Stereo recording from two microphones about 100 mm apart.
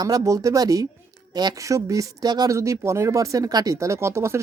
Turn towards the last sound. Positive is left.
turn(degrees=-30)  # may be behind; listen again after turning